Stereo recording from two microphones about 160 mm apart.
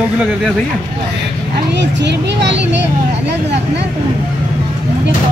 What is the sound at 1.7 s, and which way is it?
Speech, 90° right.